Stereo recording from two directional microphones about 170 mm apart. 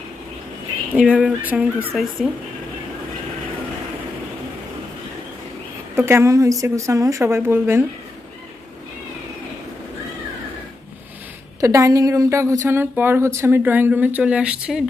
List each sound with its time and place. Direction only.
0.9 s a woman's voice: 10° right (ahead or behind)
6.0 s a woman's voice: 15° right (ahead or behind)
11.6 s a woman's voice: 20° right (ahead or behind)